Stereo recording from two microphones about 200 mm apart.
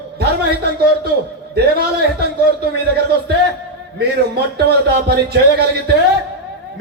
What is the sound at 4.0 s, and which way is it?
Speech, 55° right (ahead or behind).